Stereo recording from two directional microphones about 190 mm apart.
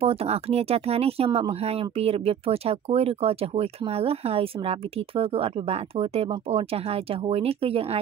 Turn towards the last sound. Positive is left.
turn(degrees=-30)  # may be behind; listen again after turning